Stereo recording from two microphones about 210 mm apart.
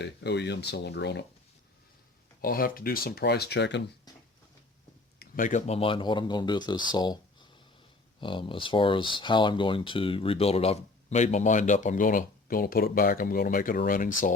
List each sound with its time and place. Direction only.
0.0 s speech: 55° left (ahead or behind)
2.4 s speech: 45° left (ahead or behind)
4.1 s a sound: 20° left (ahead or behind)
5.2 s speech: 40° left (ahead or behind); by 7.2 s 20° left (ahead or behind)
8.2 s speech: 25° left (ahead or behind); by 14.3 s 40° left (ahead or behind)